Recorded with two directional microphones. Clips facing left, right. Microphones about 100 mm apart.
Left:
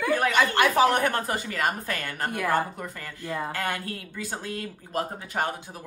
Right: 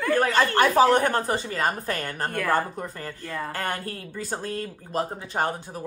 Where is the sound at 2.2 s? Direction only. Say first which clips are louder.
Right 1 dB; 15° left (ahead or behind).